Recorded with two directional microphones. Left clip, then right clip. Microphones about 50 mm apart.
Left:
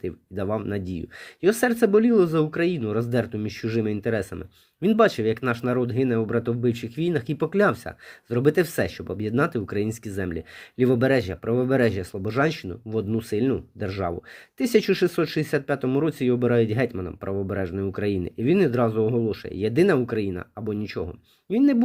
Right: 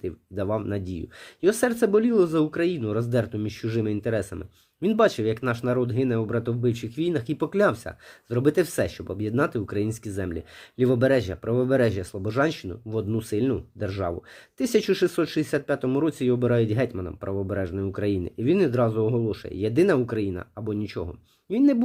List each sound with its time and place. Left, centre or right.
0.0 s speech: left